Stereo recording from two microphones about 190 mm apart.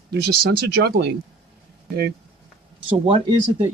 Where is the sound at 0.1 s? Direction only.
55° right (ahead or behind).